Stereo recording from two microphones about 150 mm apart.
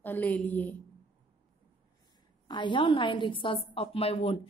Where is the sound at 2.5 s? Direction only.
30° left (ahead or behind).